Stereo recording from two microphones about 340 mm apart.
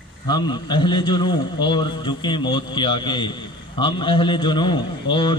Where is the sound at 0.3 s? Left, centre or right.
Centre.